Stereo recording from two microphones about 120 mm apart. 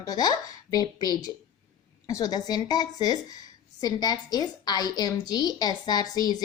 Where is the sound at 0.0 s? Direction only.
30° left (ahead or behind).